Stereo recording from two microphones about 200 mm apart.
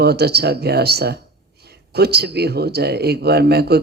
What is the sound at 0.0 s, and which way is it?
Speech, 55° right (ahead or behind).